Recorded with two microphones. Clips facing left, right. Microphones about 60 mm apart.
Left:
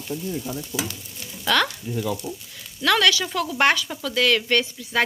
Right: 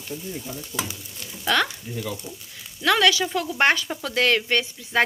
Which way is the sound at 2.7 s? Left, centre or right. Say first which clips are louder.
Even; centre.